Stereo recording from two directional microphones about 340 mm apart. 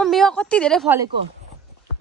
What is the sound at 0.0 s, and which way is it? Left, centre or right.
A woman's voice, centre.